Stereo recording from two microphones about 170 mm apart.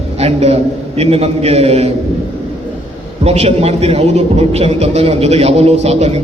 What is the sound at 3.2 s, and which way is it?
A man's voice, 35° right (ahead or behind).